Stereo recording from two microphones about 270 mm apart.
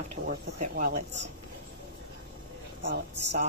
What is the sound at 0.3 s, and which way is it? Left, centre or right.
Speech, right.